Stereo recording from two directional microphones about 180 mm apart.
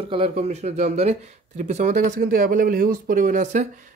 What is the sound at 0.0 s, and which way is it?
Speech, 30° right (ahead or behind).